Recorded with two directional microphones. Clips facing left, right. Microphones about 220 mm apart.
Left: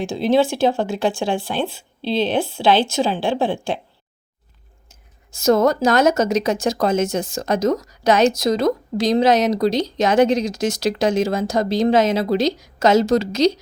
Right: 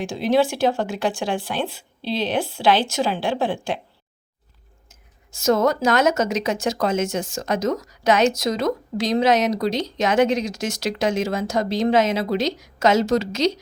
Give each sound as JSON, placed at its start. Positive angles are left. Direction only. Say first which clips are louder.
{"t": 0.0, "sound": "speech", "louder": "left 2 dB", "side_deg": 25}
{"t": 4.9, "sound": "speech", "louder": "left 2 dB", "side_deg": 35}